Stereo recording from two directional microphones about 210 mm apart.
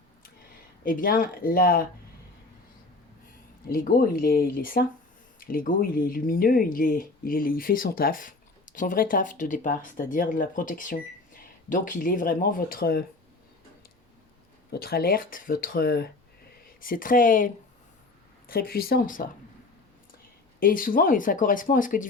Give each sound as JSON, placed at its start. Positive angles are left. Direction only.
{"t": 0.9, "sound": "speech", "side_deg": 40}
{"t": 3.7, "sound": "speech", "side_deg": 45}
{"t": 14.7, "sound": "speech", "side_deg": 45}
{"t": 20.6, "sound": "speech", "side_deg": 40}